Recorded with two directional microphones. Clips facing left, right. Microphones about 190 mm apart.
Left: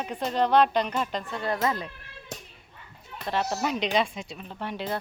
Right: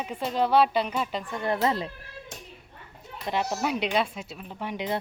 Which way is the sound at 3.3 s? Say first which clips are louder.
Even; 10° right (ahead or behind).